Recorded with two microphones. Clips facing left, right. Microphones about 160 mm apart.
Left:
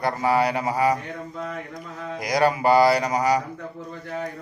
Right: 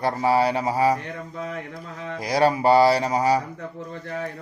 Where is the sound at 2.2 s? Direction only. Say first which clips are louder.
Right 1 dB; 30° right (ahead or behind).